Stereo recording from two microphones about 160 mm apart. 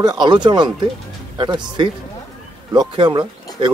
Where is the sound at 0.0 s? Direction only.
25° right (ahead or behind).